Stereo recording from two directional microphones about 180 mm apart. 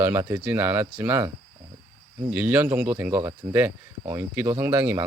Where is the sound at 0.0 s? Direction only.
10° right (ahead or behind).